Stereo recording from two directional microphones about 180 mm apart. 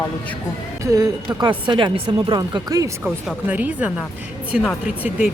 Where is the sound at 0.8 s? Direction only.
20° right (ahead or behind).